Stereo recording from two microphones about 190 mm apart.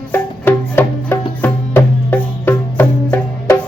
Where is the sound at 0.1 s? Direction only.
10° left (ahead or behind).